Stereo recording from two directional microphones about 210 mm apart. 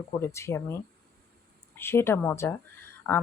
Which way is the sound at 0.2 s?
15° left (ahead or behind).